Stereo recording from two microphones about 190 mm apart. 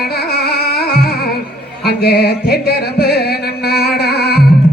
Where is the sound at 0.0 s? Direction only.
55° left (ahead or behind).